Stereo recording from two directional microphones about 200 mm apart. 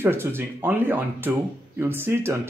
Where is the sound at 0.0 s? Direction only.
10° right (ahead or behind).